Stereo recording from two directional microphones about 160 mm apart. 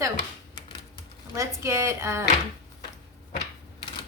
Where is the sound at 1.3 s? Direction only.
20° right (ahead or behind).